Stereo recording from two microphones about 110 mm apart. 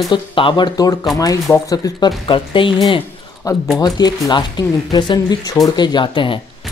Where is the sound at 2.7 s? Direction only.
35° left (ahead or behind).